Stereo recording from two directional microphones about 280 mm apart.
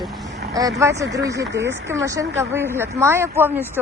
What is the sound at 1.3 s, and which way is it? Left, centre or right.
Speech, right.